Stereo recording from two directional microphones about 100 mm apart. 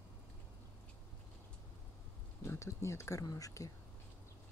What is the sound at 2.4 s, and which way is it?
Speech, 30° left (ahead or behind).